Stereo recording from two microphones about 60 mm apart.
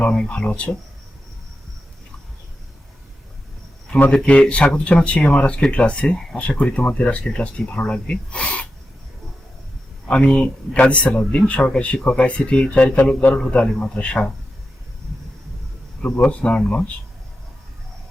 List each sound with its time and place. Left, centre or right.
0.3 s speech: centre
4.1 s speech: centre
10.1 s speech: left
16.2 s speech: centre